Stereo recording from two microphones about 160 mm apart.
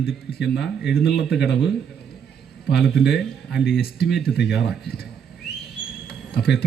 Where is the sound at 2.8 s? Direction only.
Centre (ahead or behind).